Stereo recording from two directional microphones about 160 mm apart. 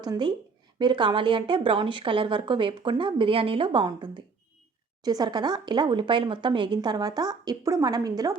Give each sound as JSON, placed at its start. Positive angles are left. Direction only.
{"t": 0.0, "sound": "speech", "side_deg": -25}